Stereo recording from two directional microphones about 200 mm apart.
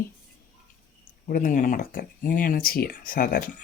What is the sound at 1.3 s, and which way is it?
Speech, 45° left (ahead or behind).